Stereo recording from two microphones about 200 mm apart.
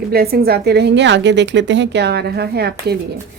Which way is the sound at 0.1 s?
50° right (ahead or behind).